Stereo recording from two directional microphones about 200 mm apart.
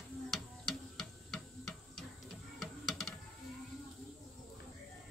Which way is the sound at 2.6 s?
Centre (ahead or behind).